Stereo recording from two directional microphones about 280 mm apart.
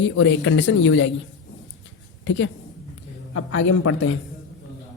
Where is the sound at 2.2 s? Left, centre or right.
Left.